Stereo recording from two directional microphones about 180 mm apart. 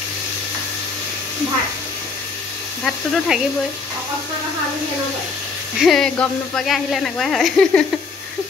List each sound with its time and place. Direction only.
2.8 s speech: 5° left (ahead or behind)
5.8 s speech: centre (ahead or behind)